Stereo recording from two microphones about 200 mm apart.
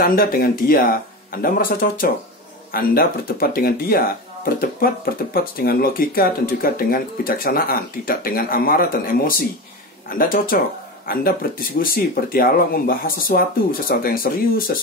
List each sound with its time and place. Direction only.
0.0 s speech: 45° left (ahead or behind)
11.8 s speech: 45° left (ahead or behind)